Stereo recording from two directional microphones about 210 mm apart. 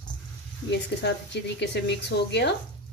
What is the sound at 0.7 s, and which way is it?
A woman's voice, 55° left (ahead or behind).